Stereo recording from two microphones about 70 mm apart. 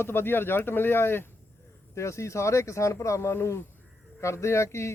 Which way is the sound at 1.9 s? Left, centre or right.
Left.